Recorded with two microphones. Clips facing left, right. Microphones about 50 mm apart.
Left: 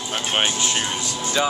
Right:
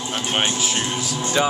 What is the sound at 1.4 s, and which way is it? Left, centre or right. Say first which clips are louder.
Speech: right 1 dB; centre.